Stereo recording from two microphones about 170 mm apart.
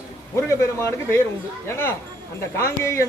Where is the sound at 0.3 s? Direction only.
15° left (ahead or behind).